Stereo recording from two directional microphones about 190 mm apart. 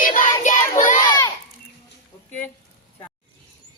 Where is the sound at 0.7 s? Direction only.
40° left (ahead or behind).